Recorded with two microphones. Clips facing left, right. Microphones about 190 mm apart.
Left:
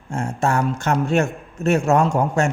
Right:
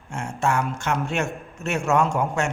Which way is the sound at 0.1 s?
35° left (ahead or behind).